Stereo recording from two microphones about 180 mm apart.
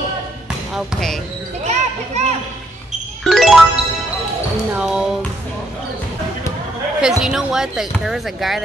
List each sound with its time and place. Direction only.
0.7 s speech: centre (ahead or behind)
1.6 s children playing: 40° right (ahead or behind)
3.3 s music: centre (ahead or behind)
4.7 s music: 5° right (ahead or behind)
7.0 s speech: 5° right (ahead or behind)